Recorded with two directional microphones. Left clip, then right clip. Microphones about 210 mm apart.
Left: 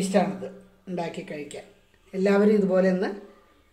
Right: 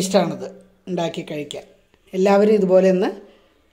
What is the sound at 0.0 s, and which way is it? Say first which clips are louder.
Speech: right 5 dB; 50° right (ahead or behind).